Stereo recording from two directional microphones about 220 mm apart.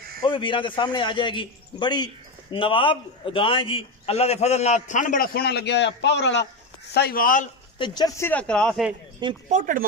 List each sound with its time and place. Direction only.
0.2 s a man's voice: 20° left (ahead or behind); by 7.4 s 40° left (ahead or behind)
7.8 s speech: 20° left (ahead or behind); by 8.9 s centre (ahead or behind)
9.5 s speech: 35° right (ahead or behind)